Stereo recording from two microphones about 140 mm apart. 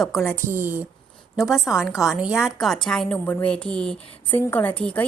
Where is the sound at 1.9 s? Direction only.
5° right (ahead or behind).